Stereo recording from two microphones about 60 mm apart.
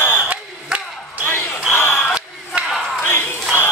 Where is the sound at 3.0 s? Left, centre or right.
Left.